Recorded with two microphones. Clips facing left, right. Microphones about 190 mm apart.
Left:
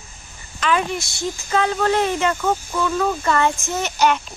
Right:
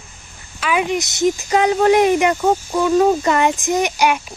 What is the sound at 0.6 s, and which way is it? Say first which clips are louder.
Speech: right 2 dB; 15° right (ahead or behind).